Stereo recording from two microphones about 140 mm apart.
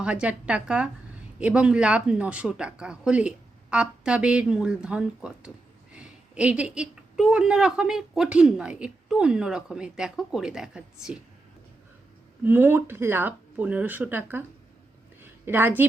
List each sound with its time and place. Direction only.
0.0 s a woman's voice: 10° right (ahead or behind)
12.5 s a woman's voice: 15° right (ahead or behind)